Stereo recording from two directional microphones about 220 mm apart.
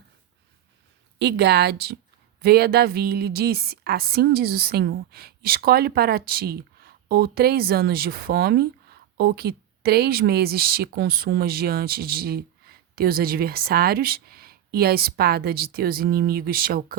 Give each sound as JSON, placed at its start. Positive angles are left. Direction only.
{"t": 1.2, "sound": "a woman's voice", "side_deg": -50}